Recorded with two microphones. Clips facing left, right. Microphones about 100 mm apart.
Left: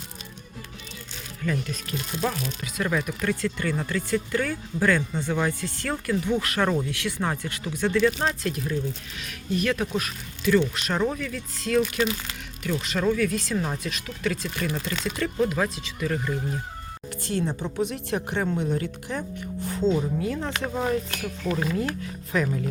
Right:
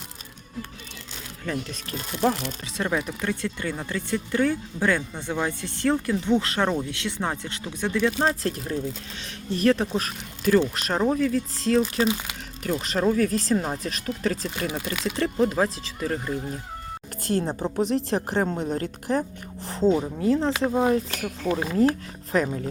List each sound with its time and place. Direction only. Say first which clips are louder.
1.5 s a woman's voice: left 2 dB; 35° right (ahead or behind)
2.7 s speech: even; 25° right (ahead or behind)
8.2 s a woman's voice: right 2 dB; 35° right (ahead or behind)
12.8 s a woman's voice: right 2 dB; 35° right (ahead or behind)
14.7 s speech: even; 10° right (ahead or behind)
15.1 s a woman's voice: right 2 dB; 30° right (ahead or behind)
21.1 s speech: right 2 dB; centre (ahead or behind)
21.7 s a woman's voice: right 6 dB; 30° right (ahead or behind)
22.4 s speech: left 1 dB; 15° right (ahead or behind)